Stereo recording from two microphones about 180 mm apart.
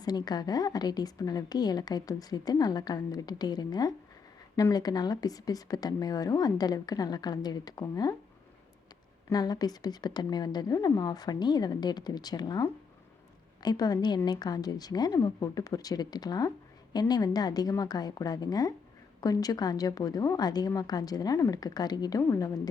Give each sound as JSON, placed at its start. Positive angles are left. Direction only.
{"t": 0.0, "sound": "a woman's voice", "side_deg": 20}
{"t": 9.3, "sound": "a woman's voice", "side_deg": 20}